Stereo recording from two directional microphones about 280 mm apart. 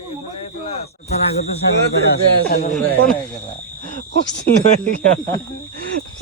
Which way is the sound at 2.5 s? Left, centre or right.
Left.